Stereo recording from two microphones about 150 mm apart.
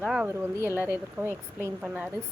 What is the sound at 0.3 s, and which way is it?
A woman's voice, 15° right (ahead or behind).